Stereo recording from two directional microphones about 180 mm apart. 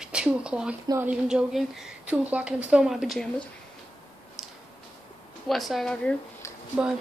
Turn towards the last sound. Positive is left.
turn(degrees=-5)  # may be behind; listen again after turning